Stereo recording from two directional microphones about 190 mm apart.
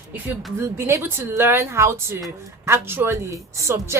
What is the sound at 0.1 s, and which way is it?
Speech, 10° right (ahead or behind).